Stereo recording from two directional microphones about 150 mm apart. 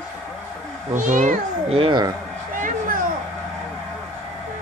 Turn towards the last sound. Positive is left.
turn(degrees=-65)  # may be behind; listen again after turning